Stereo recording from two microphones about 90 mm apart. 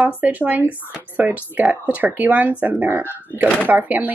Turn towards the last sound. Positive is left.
turn(degrees=-20)  # may be behind; listen again after turning